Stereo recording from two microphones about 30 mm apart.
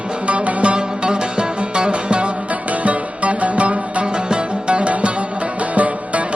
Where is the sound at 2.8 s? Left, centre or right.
Right.